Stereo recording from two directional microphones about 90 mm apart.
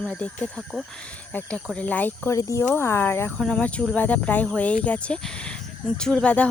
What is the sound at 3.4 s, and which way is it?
Speech, 10° left (ahead or behind).